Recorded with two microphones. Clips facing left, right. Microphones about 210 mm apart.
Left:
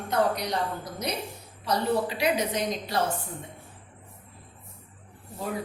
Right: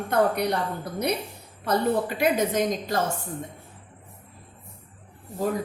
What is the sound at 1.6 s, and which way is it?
A woman's voice, 50° right (ahead or behind).